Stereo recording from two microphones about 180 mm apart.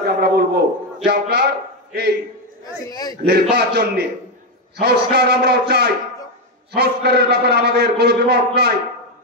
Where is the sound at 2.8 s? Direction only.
20° left (ahead or behind).